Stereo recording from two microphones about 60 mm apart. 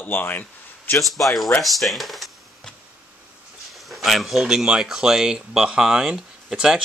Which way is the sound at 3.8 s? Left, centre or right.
Centre.